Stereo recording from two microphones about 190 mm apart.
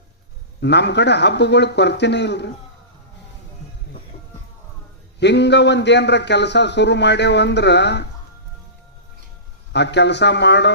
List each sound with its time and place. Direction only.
0.6 s a man's voice: 65° left (ahead or behind)
5.2 s a man's voice: 65° left (ahead or behind)
9.7 s a man's voice: 65° left (ahead or behind)